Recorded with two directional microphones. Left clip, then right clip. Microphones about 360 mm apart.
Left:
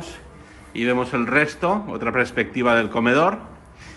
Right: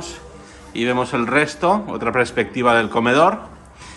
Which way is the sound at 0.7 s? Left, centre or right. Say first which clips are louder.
Right 2 dB; centre.